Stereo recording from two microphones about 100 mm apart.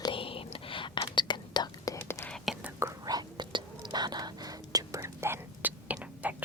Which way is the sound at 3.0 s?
40° right (ahead or behind).